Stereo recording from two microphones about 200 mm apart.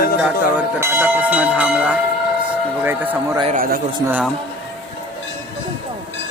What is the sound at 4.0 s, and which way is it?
Speech, 15° right (ahead or behind).